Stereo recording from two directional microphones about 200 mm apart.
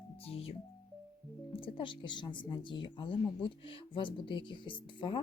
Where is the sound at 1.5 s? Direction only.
25° left (ahead or behind).